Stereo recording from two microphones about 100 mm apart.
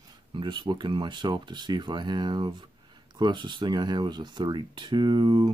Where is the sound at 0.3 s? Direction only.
50° right (ahead or behind).